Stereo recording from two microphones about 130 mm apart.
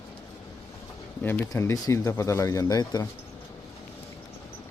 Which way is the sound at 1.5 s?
25° left (ahead or behind).